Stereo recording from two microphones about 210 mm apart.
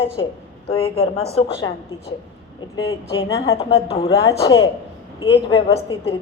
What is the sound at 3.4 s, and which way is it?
Speech, 30° left (ahead or behind).